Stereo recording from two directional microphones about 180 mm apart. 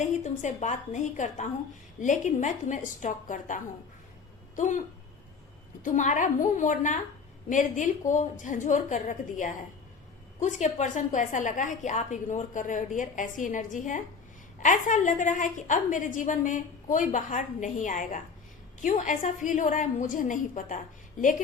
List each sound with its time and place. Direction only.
0.0 s a woman's voice: 40° left (ahead or behind)
5.8 s a woman's voice: 45° left (ahead or behind)